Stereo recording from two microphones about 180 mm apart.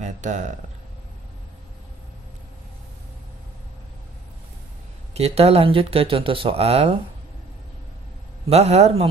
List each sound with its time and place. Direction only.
0.0 s speech: 40° right (ahead or behind)
5.1 s speech: 35° right (ahead or behind)
8.5 s speech: 35° right (ahead or behind)